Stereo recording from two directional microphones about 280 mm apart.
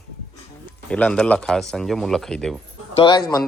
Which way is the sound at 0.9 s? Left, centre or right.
Centre.